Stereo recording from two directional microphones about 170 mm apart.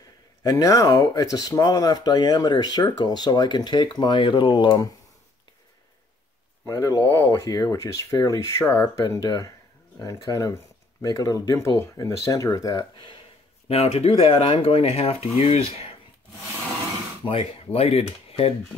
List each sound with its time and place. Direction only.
0.4 s speech: 20° left (ahead or behind)
6.6 s speech: 20° left (ahead or behind)
13.7 s speech: 35° left (ahead or behind)
17.2 s speech: 35° left (ahead or behind)